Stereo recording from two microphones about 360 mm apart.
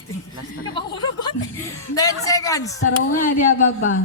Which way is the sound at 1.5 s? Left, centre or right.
Centre.